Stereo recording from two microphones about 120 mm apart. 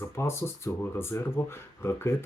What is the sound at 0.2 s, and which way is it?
Speech, 20° left (ahead or behind).